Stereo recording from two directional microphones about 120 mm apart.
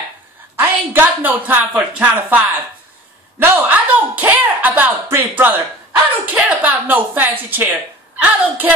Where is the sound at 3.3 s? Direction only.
20° right (ahead or behind).